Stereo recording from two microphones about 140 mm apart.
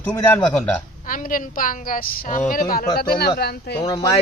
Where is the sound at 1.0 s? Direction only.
75° left (ahead or behind).